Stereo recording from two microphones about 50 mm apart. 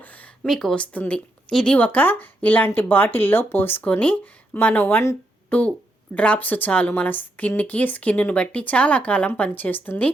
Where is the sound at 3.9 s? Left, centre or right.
Left.